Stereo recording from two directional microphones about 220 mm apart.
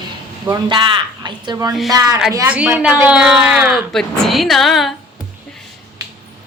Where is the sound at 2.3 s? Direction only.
5° right (ahead or behind).